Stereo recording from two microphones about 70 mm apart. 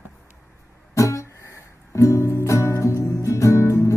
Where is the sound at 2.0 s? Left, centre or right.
Left.